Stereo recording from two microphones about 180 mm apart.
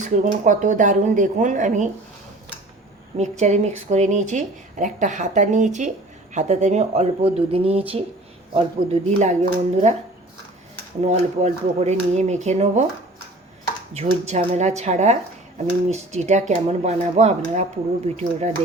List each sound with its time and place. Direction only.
0.0 s speech: 45° right (ahead or behind)
3.2 s speech: 40° right (ahead or behind)
11.0 s speech: 40° right (ahead or behind)
13.9 s speech: 40° right (ahead or behind)